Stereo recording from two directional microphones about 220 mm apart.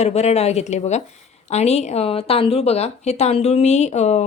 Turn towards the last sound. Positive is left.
turn(degrees=30)  # may be behind; listen again after turning